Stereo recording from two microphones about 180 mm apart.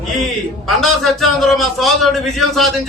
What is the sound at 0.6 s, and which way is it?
A man's voice, centre (ahead or behind).